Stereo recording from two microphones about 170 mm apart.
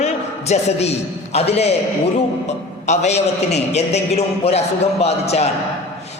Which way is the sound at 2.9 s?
40° left (ahead or behind).